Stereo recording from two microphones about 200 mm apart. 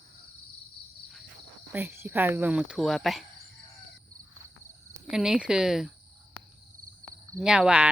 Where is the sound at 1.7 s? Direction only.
10° right (ahead or behind).